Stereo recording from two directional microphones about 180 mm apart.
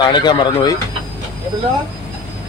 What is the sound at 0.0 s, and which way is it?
Speech, 25° left (ahead or behind).